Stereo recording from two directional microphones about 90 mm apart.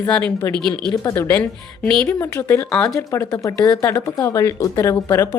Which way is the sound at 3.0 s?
35° left (ahead or behind).